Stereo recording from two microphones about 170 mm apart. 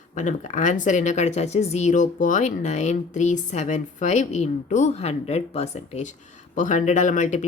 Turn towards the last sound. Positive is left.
turn(degrees=45)  # may be behind; listen again after turning